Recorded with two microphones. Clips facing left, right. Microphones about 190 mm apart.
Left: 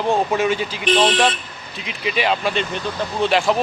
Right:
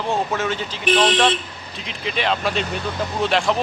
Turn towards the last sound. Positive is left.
turn(degrees=5)  # may be behind; listen again after turning